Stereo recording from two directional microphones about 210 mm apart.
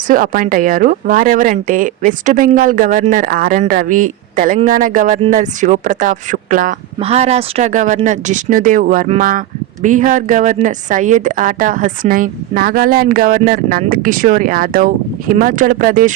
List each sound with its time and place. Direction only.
0.1 s a woman's voice: 40° right (ahead or behind)